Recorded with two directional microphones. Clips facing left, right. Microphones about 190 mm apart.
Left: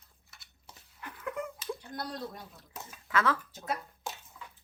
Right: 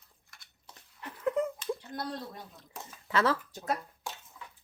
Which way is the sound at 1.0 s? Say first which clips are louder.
Right 7 dB; 30° right (ahead or behind).